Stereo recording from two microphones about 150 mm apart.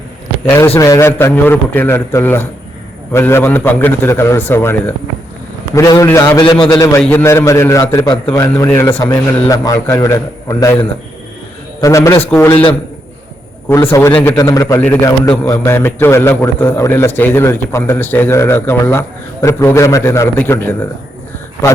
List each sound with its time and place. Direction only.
0.8 s a man's voice: 20° left (ahead or behind)
6.4 s a man's voice: 30° left (ahead or behind)
11.8 s a man's voice: 20° left (ahead or behind)
13.7 s a man's voice: 20° left (ahead or behind)